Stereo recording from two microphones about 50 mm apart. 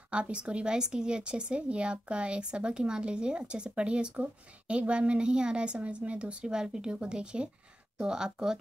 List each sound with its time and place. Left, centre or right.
0.1 s speech: right